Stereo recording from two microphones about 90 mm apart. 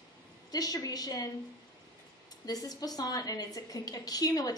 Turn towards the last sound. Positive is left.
turn(degrees=45)  # may be behind; listen again after turning